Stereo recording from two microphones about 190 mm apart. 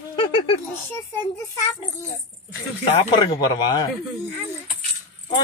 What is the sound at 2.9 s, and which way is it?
Speech, 25° left (ahead or behind).